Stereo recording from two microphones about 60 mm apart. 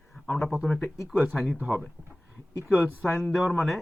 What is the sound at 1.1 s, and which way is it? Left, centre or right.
Speech, right.